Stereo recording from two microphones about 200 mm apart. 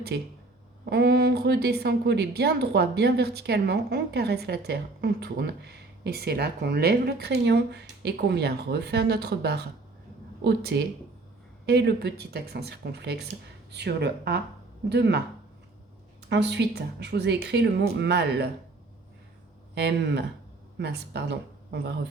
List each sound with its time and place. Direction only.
0.1 s a woman's voice: 55° right (ahead or behind)
16.3 s a woman's voice: 55° right (ahead or behind)
19.7 s a woman's voice: 55° right (ahead or behind)